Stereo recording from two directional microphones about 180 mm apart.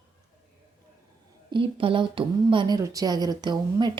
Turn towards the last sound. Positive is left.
turn(degrees=-25)  # may be behind; listen again after turning